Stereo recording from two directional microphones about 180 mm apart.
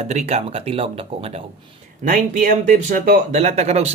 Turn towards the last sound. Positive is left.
turn(degrees=-35)  # may be behind; listen again after turning